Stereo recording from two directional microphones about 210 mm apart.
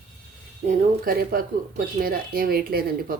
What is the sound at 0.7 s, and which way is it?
Speech, 45° right (ahead or behind).